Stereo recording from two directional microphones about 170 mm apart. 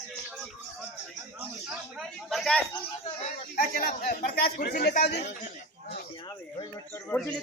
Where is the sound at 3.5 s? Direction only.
60° left (ahead or behind); by 5.3 s 75° left (ahead or behind).